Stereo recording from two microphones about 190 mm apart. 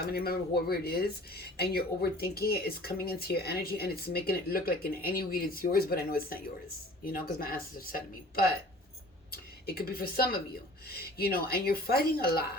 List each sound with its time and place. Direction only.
0.0 s a woman's voice: 55° left (ahead or behind)